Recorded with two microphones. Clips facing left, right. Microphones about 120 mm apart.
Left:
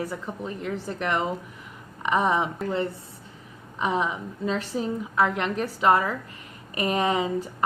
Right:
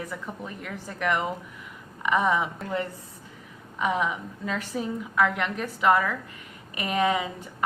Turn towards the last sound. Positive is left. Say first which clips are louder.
# left 1 dB
turn(degrees=35)  # may be behind; listen again after turning